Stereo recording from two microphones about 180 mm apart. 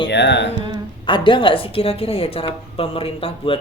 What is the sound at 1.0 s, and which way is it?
A woman's voice, 25° left (ahead or behind).